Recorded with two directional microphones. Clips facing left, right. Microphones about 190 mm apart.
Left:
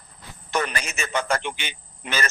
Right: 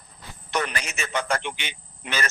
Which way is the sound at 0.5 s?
45° left (ahead or behind).